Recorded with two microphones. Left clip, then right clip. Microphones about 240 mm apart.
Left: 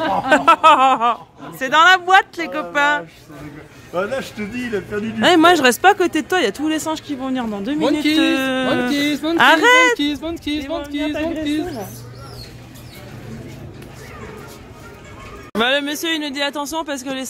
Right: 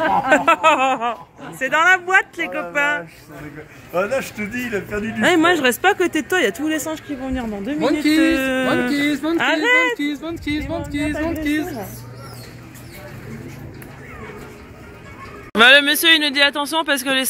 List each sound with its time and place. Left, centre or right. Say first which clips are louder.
0.3 s speech: left 5 dB; centre
1.6 s speech: left 3 dB; left
3.9 s speech: right 2 dB; right
5.2 s speech: left 3 dB; centre
7.1 s speech: left 2 dB; centre
10.5 s speech: even; centre
11.4 s a woman's voice: even; centre
15.5 s speech: right 7 dB; centre